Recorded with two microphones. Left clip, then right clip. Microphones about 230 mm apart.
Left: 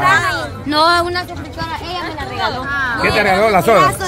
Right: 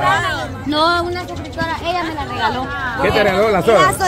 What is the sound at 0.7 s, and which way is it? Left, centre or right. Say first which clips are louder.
Speech: left 3 dB; left.